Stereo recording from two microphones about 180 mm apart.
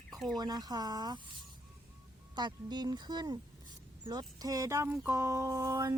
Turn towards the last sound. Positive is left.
turn(degrees=-20)  # may be behind; listen again after turning